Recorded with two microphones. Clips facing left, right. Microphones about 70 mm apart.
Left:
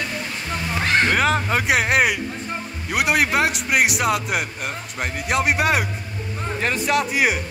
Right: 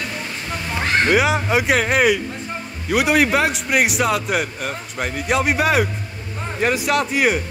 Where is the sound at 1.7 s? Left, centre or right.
Centre.